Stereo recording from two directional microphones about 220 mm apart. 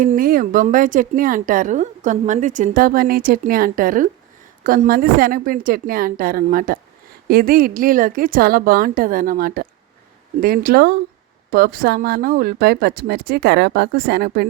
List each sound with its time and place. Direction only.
0.0 s a woman's voice: 40° right (ahead or behind)